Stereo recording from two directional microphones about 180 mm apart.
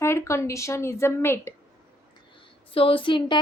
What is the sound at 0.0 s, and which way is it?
A woman's voice, 15° left (ahead or behind).